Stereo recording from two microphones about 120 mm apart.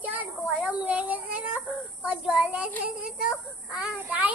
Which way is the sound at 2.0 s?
10° right (ahead or behind).